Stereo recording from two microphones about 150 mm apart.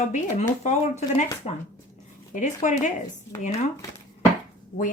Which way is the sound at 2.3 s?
55° left (ahead or behind).